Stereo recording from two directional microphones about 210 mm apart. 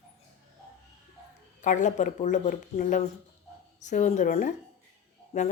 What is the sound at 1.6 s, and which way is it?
Speech, 35° left (ahead or behind).